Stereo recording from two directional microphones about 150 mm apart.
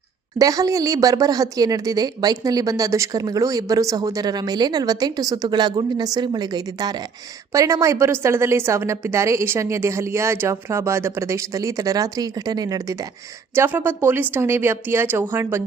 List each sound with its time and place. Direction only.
0.3 s a woman's voice: 25° right (ahead or behind)